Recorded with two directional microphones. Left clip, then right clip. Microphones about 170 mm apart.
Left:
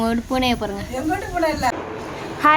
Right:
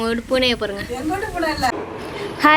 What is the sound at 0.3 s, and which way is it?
Speech, 15° left (ahead or behind).